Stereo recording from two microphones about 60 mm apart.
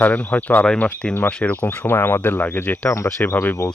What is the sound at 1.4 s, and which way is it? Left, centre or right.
Speech, left.